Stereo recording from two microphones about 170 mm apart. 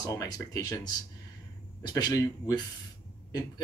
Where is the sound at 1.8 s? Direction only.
20° left (ahead or behind).